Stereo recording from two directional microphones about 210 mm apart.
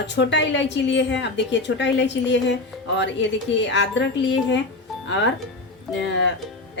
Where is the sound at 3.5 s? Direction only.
55° left (ahead or behind).